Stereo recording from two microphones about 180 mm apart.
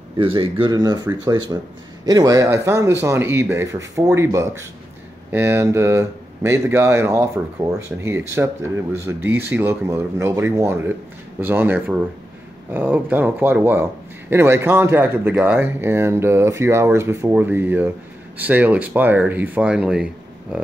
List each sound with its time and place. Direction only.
0.2 s speech: 30° right (ahead or behind); by 20.1 s 5° right (ahead or behind)